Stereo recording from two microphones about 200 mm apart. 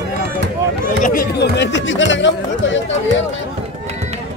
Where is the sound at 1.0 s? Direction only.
45° left (ahead or behind); by 2.8 s 65° left (ahead or behind).